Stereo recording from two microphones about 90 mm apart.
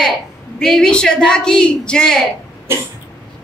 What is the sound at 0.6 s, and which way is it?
Speech, 5° left (ahead or behind).